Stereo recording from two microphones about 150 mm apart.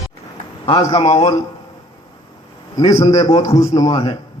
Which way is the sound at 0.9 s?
35° left (ahead or behind).